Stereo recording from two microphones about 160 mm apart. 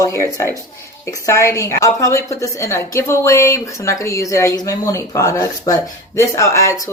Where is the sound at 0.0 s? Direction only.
20° left (ahead or behind).